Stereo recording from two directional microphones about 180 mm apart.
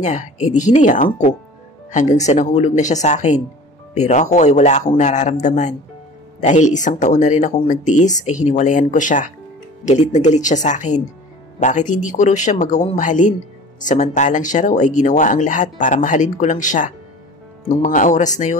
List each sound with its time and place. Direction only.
0.0 s speech: 40° left (ahead or behind)